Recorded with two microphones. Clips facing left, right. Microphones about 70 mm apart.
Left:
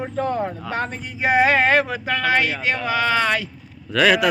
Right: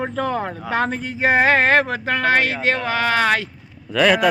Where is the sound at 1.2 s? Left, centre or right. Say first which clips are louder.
Right 1 dB; right.